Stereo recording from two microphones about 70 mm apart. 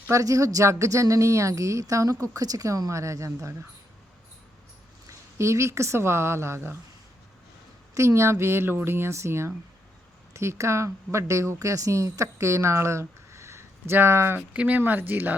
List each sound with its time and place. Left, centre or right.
0.1 s a woman's voice: right
5.0 s a woman's voice: right
7.9 s speech: right
14.3 s speech: centre